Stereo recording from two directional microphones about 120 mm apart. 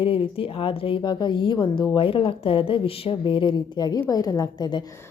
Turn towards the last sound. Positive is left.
turn(degrees=35)  # may be behind; listen again after turning